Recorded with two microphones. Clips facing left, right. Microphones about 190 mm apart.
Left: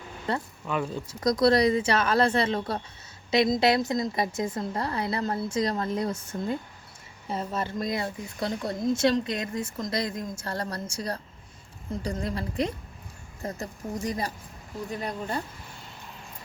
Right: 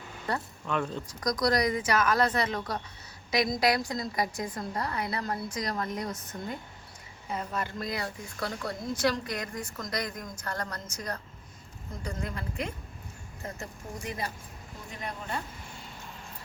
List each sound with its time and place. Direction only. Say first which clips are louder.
0.3 s speech: left 3 dB; 25° left (ahead or behind)
0.7 s speech: left 2 dB; 5° left (ahead or behind)
1.2 s speech: left 6 dB; 25° left (ahead or behind)